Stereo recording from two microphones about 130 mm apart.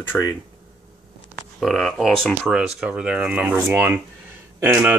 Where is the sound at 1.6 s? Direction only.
Centre (ahead or behind).